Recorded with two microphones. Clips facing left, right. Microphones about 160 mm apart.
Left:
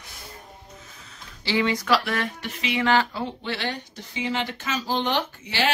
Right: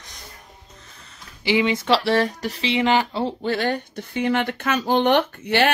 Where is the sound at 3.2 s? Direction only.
40° right (ahead or behind).